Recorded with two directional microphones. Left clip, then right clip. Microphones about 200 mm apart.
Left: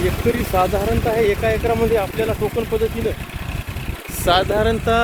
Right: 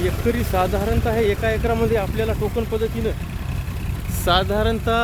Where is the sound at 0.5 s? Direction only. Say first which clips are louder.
Left 4 dB; 5° right (ahead or behind).